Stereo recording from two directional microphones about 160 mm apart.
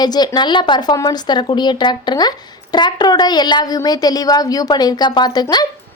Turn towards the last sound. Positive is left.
turn(degrees=25)  # may be behind; listen again after turning